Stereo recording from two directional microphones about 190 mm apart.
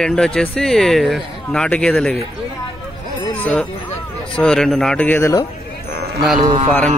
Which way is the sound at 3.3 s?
5° left (ahead or behind).